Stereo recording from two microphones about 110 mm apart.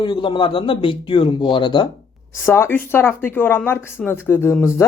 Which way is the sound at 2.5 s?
20° left (ahead or behind).